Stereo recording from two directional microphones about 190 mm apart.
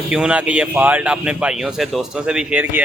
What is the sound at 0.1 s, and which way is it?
Speech, 5° right (ahead or behind).